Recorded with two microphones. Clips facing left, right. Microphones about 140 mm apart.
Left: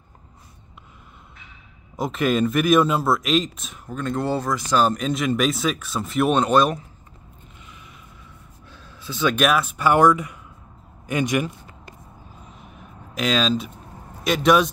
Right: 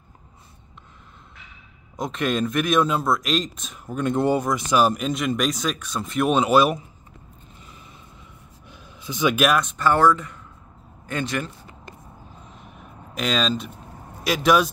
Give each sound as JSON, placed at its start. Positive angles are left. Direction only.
{"t": 2.0, "sound": "speech", "side_deg": 5}
{"t": 3.9, "sound": "speech", "side_deg": -15}
{"t": 4.8, "sound": "speech", "side_deg": 0}
{"t": 8.6, "sound": "a sound", "side_deg": -15}
{"t": 9.4, "sound": "speech", "side_deg": 5}
{"t": 12.5, "sound": "a sound", "side_deg": 0}
{"t": 14.2, "sound": "speech", "side_deg": 0}